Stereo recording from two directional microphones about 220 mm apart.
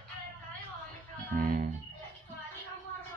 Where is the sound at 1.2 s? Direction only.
40° right (ahead or behind).